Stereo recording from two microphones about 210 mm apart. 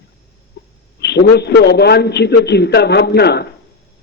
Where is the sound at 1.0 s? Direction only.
50° left (ahead or behind).